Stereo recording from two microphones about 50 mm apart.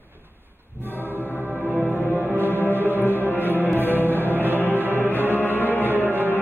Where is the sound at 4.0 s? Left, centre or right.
Left.